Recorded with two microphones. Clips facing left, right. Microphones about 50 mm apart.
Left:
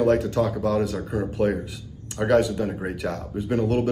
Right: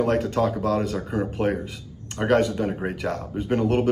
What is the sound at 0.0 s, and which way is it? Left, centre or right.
Speech, right.